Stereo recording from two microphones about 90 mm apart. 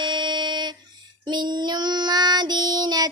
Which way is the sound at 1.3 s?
55° right (ahead or behind).